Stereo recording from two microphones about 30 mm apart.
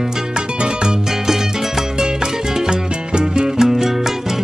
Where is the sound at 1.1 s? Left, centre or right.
Centre; by 3.5 s right.